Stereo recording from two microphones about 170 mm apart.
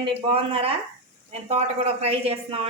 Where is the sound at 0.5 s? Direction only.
35° right (ahead or behind).